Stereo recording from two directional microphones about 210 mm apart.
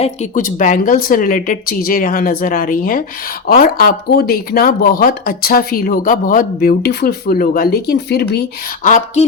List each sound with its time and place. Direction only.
0.0 s a woman's voice: 35° left (ahead or behind)